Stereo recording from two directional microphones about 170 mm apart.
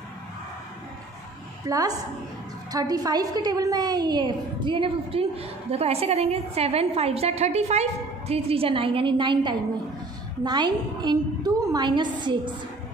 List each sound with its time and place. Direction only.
1.7 s a woman's voice: 20° right (ahead or behind)